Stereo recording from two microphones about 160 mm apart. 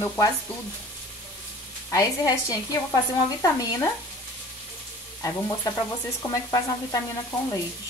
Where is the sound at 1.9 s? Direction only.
20° left (ahead or behind).